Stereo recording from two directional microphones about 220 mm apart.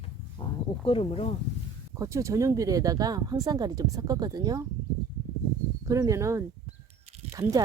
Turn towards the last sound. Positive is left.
turn(degrees=-15)  # may be behind; listen again after turning